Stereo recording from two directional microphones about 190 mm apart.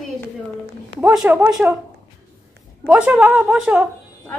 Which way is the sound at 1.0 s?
5° right (ahead or behind).